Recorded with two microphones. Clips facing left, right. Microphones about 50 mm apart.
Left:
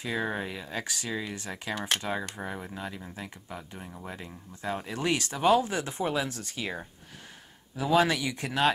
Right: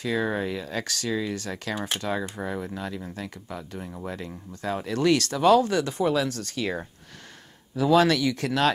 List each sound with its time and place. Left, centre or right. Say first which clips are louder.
0.0 s speech: right 5 dB; centre
3.8 s speech: right 6 dB; centre
4.1 s speech: right 6 dB; centre
7.7 s speech: right 5 dB; centre